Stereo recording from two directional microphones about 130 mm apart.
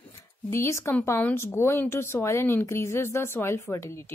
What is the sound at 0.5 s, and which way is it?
Speech, 20° left (ahead or behind).